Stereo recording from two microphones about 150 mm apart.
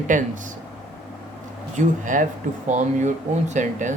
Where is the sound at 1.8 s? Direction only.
60° right (ahead or behind).